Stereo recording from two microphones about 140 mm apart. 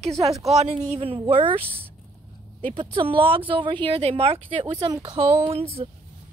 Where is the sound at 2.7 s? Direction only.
40° right (ahead or behind).